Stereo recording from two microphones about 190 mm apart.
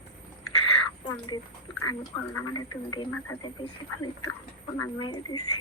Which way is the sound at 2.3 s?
20° left (ahead or behind).